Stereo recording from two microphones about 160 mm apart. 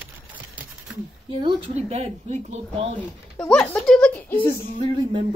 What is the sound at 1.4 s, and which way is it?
Speech, 35° right (ahead or behind).